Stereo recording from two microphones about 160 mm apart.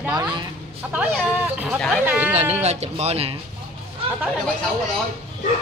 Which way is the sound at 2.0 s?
10° right (ahead or behind).